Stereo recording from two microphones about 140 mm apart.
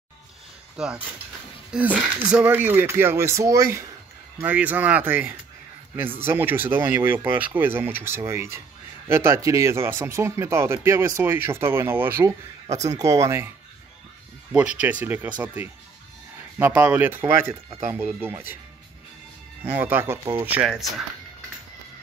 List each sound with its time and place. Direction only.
0.7 s speech: 5° right (ahead or behind); by 3.8 s 25° right (ahead or behind)
4.4 s speech: 10° right (ahead or behind)
14.5 s speech: 10° right (ahead or behind)
19.6 s speech: 15° right (ahead or behind)